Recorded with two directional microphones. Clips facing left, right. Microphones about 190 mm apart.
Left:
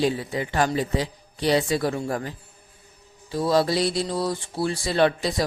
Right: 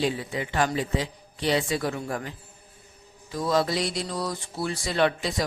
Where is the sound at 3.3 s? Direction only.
30° left (ahead or behind).